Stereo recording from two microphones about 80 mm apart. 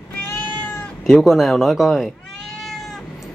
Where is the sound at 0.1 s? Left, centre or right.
Left.